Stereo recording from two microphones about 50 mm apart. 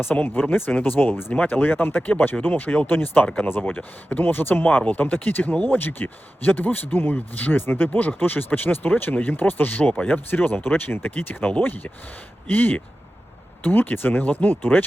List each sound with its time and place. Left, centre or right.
0.0 s speech: left
1.3 s speech: left
3.6 s speech: left